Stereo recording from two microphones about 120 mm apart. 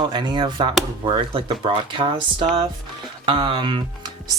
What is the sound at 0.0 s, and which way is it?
Speech, 40° right (ahead or behind).